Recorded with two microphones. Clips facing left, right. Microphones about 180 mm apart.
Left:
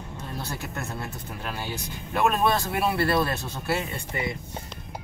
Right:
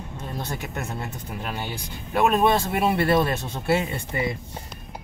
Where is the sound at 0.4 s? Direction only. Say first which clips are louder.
Right 3 dB; 20° right (ahead or behind).